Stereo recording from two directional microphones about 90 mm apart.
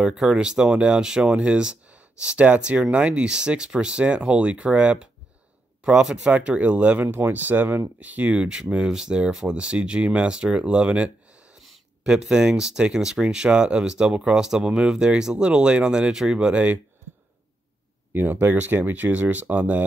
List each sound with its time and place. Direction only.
0.0 s speech: 5° right (ahead or behind)
18.1 s speech: 20° right (ahead or behind)